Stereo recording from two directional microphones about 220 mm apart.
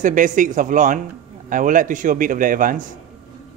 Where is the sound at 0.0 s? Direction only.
35° right (ahead or behind).